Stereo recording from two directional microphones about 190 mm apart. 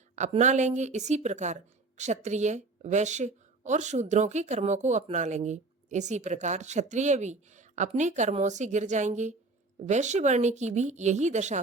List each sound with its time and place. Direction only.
0.2 s a woman's voice: 40° right (ahead or behind)